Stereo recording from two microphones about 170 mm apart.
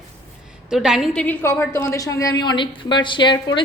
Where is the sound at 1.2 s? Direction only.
15° left (ahead or behind).